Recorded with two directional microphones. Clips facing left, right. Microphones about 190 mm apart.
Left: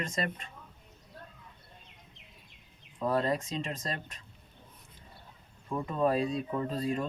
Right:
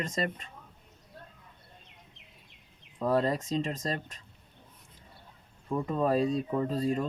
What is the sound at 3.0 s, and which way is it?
Speech, 35° right (ahead or behind).